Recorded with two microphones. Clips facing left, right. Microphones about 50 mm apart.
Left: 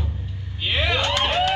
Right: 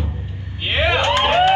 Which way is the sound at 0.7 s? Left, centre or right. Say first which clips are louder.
Right 5 dB; right.